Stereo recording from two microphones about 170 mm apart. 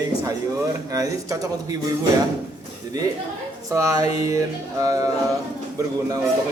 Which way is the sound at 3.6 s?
20° right (ahead or behind).